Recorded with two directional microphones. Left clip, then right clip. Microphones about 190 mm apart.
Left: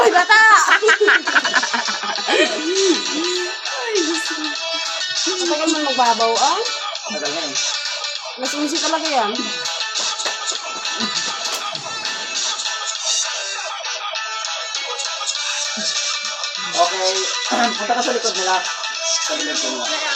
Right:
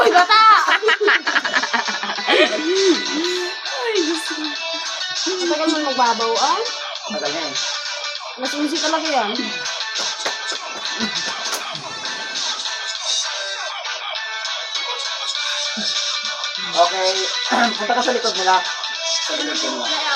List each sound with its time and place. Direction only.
0.0 s a sound: 10° left (ahead or behind)
0.7 s a sound: 20° right (ahead or behind)
2.2 s music: 15° right (ahead or behind)
2.7 s music: 25° left (ahead or behind)
5.2 s music: 25° left (ahead or behind)
8.7 s speech: 25° left (ahead or behind)
16.7 s speech: 25° left (ahead or behind)